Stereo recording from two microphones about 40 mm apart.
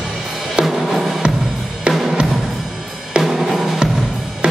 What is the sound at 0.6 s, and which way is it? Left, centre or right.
Drum kit, centre.